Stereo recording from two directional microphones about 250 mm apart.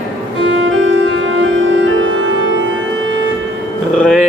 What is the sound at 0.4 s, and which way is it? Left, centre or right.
Music, right.